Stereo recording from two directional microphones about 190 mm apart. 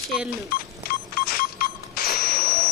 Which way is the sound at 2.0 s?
50° left (ahead or behind).